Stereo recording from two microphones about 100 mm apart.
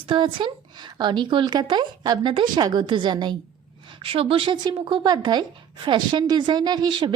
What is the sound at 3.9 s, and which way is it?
Speech, 70° right (ahead or behind).